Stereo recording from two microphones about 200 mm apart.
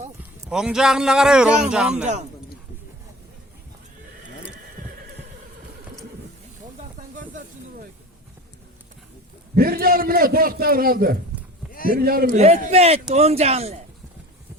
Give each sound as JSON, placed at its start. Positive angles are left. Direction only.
{"t": 0.5, "sound": "a man's voice", "side_deg": -5}
{"t": 9.6, "sound": "a man's voice", "side_deg": -50}
{"t": 11.7, "sound": "a sound", "side_deg": 45}
{"t": 11.9, "sound": "a man's voice", "side_deg": -50}